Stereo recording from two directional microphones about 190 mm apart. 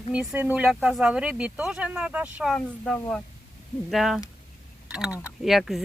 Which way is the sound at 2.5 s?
5° left (ahead or behind).